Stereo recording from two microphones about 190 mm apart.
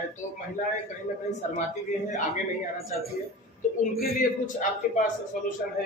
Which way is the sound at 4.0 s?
45° left (ahead or behind).